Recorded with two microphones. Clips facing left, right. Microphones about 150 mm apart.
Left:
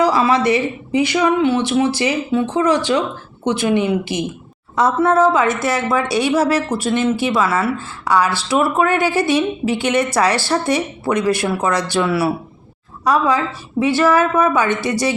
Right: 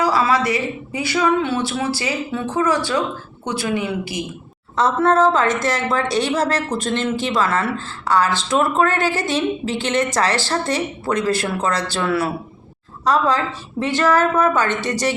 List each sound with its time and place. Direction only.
0.0 s speech: 20° left (ahead or behind)
4.7 s speech: 10° left (ahead or behind)